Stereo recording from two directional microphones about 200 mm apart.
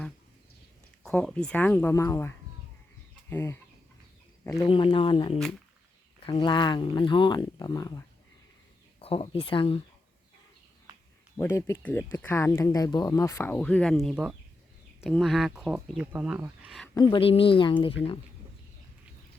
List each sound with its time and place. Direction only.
1.0 s speech: 5° left (ahead or behind)
4.6 s speech: 25° left (ahead or behind)
11.3 s speech: 15° left (ahead or behind); by 16.8 s 5° right (ahead or behind)
16.8 s speech: 20° left (ahead or behind)